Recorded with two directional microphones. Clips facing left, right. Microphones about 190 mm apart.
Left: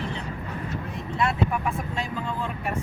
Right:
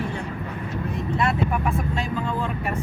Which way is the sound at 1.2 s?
60° right (ahead or behind).